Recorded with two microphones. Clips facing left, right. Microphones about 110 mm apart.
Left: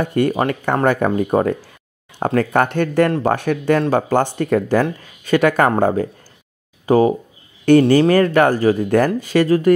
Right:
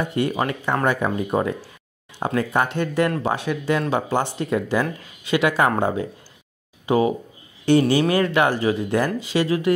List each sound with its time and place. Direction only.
0.0 s speech: 50° left (ahead or behind)
7.7 s speech: 50° left (ahead or behind)